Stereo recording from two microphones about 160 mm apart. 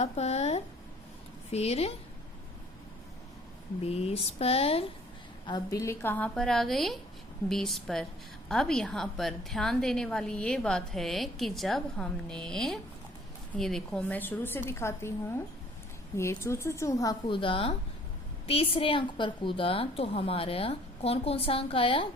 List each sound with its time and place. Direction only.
0.0 s a woman's voice: 40° left (ahead or behind)
3.8 s a woman's voice: 40° left (ahead or behind)
5.5 s a woman's voice: 25° left (ahead or behind)
16.1 s a woman's voice: 15° left (ahead or behind); by 22.0 s 35° left (ahead or behind)